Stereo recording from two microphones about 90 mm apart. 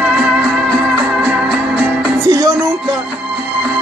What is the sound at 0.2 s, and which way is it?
Music, 15° right (ahead or behind).